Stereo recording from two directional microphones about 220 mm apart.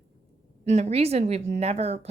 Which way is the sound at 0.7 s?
30° right (ahead or behind).